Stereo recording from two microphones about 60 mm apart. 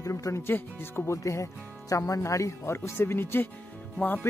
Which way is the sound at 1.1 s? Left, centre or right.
Left.